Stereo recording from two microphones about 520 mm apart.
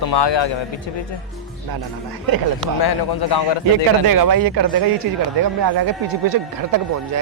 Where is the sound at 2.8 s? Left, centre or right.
Left.